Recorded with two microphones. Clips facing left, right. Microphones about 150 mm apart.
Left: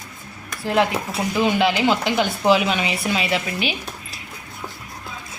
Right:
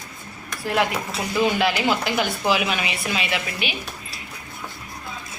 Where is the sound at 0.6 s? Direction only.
25° left (ahead or behind).